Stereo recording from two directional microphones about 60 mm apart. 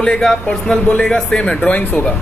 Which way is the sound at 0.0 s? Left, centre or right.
Centre.